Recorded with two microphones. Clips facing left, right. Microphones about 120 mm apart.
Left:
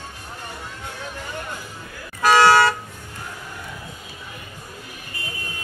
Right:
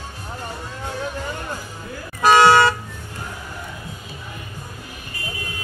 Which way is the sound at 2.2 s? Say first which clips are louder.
Right 2 dB; 20° right (ahead or behind).